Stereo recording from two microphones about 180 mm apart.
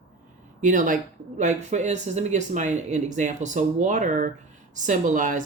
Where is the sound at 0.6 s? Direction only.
45° right (ahead or behind).